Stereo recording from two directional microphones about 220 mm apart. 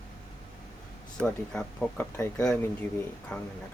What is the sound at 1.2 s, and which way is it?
Speech, 5° left (ahead or behind).